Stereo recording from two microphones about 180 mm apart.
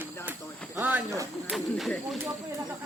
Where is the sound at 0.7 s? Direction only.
10° right (ahead or behind).